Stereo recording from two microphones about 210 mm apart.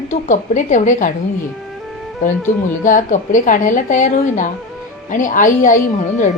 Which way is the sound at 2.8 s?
40° left (ahead or behind).